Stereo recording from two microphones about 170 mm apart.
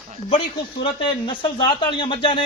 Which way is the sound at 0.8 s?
30° left (ahead or behind).